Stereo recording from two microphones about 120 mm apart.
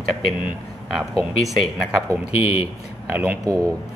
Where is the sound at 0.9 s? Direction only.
Centre (ahead or behind).